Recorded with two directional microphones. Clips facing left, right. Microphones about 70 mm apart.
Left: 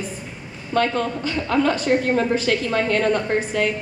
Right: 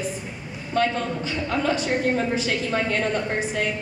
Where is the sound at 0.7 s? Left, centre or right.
Left.